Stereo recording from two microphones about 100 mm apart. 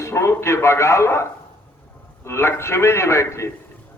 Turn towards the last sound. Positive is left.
turn(degrees=30)  # may be behind; listen again after turning